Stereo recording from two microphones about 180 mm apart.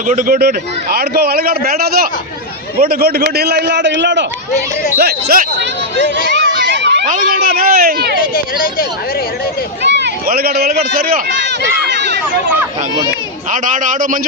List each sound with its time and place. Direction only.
0.1 s a man's voice: 50° right (ahead or behind); by 4.3 s 85° right
4.9 s a man's voice: 60° right (ahead or behind)
6.3 s a sound: 75° right (ahead or behind)
7.1 s a man's voice: 50° right (ahead or behind)
8.4 s speech: 55° left (ahead or behind)
9.8 s a man's voice: 75° right (ahead or behind); by 11.5 s 55° right (ahead or behind)
11.9 s a sound: 70° right (ahead or behind)
13.5 s a man's voice: 45° right (ahead or behind)